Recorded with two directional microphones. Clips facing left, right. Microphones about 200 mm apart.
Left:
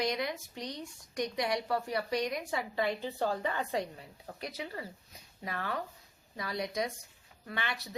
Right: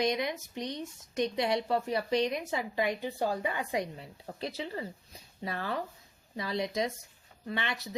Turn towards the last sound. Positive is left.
turn(degrees=-25)  # may be behind; listen again after turning